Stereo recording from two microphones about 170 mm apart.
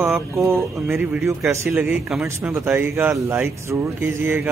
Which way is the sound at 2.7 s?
15° right (ahead or behind).